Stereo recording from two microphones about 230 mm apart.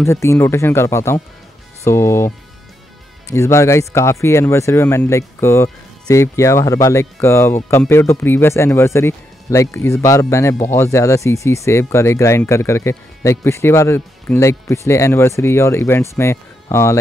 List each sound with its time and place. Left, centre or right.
0.0 s speech: centre